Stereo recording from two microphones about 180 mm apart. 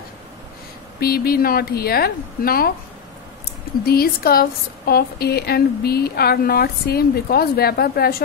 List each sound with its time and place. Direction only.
0.9 s a woman's voice: 60° left (ahead or behind)
3.8 s a woman's voice: 55° left (ahead or behind)